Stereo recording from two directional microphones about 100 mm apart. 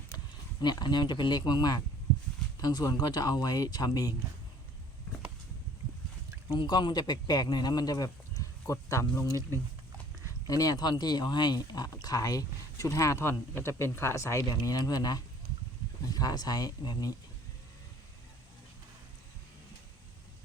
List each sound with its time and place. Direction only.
0.6 s speech: 45° left (ahead or behind)
6.5 s speech: 45° left (ahead or behind)
9.2 s speech: 35° right (ahead or behind)
10.4 s speech: 35° left (ahead or behind)
14.4 s speech: 40° left (ahead or behind)